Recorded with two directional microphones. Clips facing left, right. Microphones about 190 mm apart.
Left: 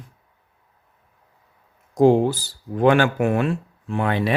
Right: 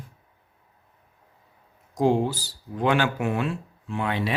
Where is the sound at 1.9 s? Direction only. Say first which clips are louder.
Left 6 dB; 55° left (ahead or behind).